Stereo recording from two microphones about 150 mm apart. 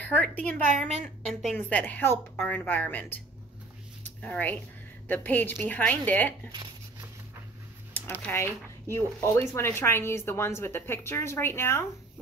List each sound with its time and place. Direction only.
0.0 s a woman's voice: 10° left (ahead or behind)
0.7 s a woman's voice: 50° right (ahead or behind)
1.0 s a woman's voice: 5° left (ahead or behind)
4.0 s a sound: 10° left (ahead or behind)
5.0 s a woman's voice: 10° left (ahead or behind)
6.5 s a sound: 30° right (ahead or behind)
8.3 s a woman's voice: 15° left (ahead or behind)